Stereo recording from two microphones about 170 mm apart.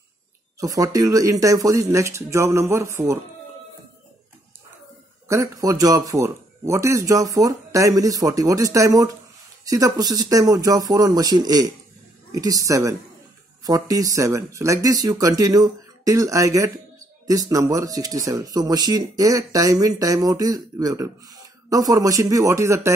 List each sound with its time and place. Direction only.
0.6 s speech: 20° right (ahead or behind)
5.3 s speech: 20° right (ahead or behind)